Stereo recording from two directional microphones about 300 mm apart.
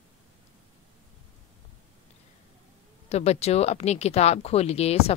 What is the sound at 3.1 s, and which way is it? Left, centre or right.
Speech, left.